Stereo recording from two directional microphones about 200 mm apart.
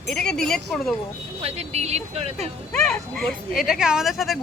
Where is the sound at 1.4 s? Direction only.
30° right (ahead or behind).